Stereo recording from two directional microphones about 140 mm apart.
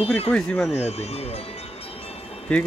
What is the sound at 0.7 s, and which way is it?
Speech, 50° left (ahead or behind).